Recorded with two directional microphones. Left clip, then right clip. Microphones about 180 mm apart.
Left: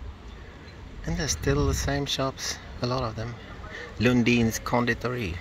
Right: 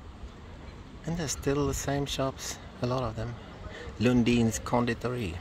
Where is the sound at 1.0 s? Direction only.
5° right (ahead or behind).